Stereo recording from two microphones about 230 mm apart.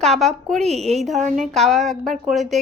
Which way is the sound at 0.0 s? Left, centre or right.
Centre.